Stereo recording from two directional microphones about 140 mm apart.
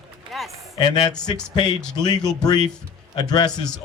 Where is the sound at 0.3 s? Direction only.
Centre (ahead or behind).